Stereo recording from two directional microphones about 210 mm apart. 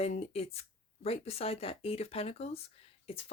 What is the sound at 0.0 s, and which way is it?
Speech, 30° left (ahead or behind).